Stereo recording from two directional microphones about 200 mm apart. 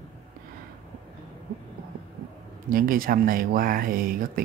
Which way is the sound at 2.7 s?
45° right (ahead or behind).